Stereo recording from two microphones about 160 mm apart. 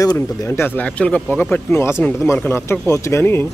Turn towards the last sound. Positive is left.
turn(degrees=15)  # may be behind; listen again after turning